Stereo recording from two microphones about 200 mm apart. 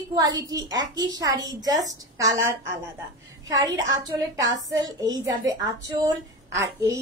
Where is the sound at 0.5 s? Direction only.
20° right (ahead or behind).